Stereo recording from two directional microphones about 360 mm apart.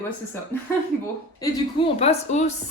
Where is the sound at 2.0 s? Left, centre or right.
Centre.